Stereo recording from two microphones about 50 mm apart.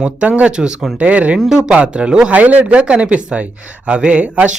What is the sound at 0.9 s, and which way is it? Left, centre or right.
Speech, right.